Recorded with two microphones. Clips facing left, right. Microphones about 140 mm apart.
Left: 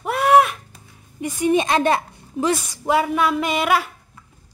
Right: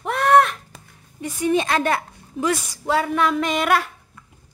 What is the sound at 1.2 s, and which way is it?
Speech, 15° left (ahead or behind).